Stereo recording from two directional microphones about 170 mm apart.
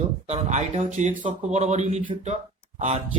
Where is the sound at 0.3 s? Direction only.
45° right (ahead or behind).